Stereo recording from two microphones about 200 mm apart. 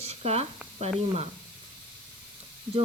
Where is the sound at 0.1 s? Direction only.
30° right (ahead or behind).